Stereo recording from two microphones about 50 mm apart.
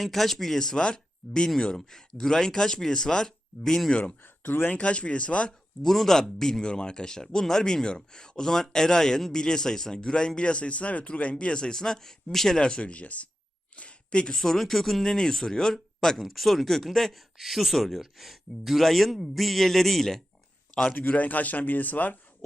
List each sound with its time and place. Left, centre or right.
0.0 s speech: centre
4.2 s speech: left
4.7 s speech: left
5.8 s speech: centre
20.9 s speech: left